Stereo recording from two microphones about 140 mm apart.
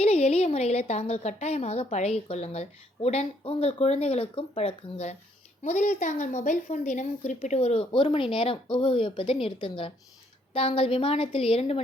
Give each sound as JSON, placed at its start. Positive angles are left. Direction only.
{"t": 0.0, "sound": "a woman's voice", "side_deg": 50}
{"t": 5.6, "sound": "a woman's voice", "side_deg": 60}